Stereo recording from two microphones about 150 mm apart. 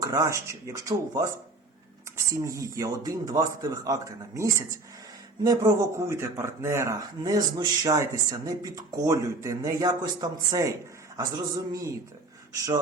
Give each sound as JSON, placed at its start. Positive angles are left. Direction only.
{"t": 0.0, "sound": "speech", "side_deg": -20}